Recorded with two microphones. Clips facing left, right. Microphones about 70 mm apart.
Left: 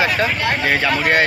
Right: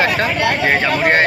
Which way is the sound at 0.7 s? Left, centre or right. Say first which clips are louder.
Even; right.